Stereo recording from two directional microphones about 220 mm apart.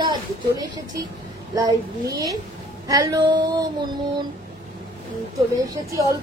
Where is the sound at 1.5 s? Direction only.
15° right (ahead or behind).